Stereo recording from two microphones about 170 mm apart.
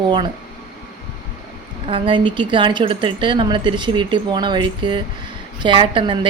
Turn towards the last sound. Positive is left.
turn(degrees=-30)  # may be behind; listen again after turning